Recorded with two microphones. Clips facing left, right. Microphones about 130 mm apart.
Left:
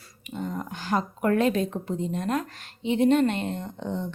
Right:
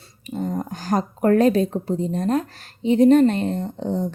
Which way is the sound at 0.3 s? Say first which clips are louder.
Right 6 dB; 35° right (ahead or behind).